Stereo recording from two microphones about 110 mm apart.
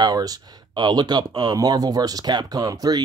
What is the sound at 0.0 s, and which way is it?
Speech, 35° right (ahead or behind).